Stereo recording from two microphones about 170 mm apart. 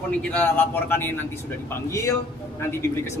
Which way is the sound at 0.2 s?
10° left (ahead or behind).